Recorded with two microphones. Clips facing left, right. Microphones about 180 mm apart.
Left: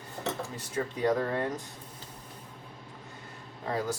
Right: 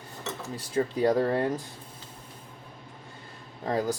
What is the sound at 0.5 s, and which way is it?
Speech, 35° right (ahead or behind).